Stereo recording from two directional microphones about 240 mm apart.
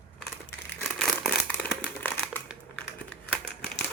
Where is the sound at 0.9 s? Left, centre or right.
Centre.